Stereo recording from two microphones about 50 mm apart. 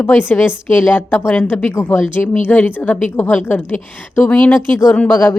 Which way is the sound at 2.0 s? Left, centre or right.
Left.